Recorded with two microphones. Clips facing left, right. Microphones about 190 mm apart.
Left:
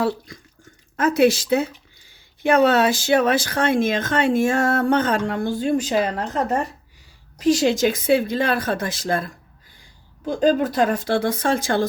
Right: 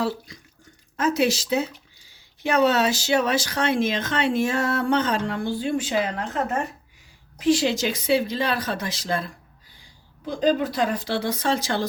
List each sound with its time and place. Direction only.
0.9 s speech: 55° left (ahead or behind)